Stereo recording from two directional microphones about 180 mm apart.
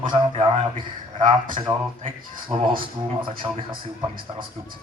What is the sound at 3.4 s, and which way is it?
Speech, 15° right (ahead or behind).